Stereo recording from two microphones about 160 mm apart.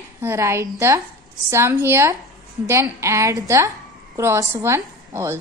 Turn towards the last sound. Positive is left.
turn(degrees=-15)  # may be behind; listen again after turning